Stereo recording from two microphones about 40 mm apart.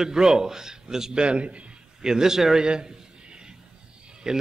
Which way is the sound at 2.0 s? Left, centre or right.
Centre.